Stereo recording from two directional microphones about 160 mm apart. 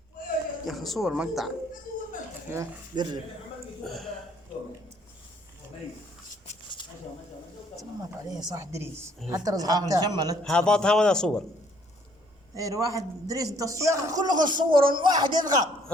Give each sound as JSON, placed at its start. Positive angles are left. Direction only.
{"t": 0.6, "sound": "a man's voice", "side_deg": 0}
{"t": 2.5, "sound": "a man's voice", "side_deg": -25}
{"t": 3.8, "sound": "a man's voice", "side_deg": 0}
{"t": 8.3, "sound": "a man's voice", "side_deg": -20}
{"t": 10.4, "sound": "a man's voice", "side_deg": 5}
{"t": 12.5, "sound": "a man's voice", "side_deg": -20}